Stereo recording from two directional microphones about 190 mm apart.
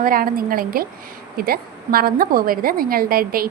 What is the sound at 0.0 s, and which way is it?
A woman's voice, 50° right (ahead or behind).